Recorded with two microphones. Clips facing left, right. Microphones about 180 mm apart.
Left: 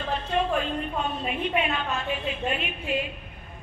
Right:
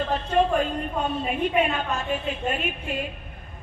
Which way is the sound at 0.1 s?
45° right (ahead or behind).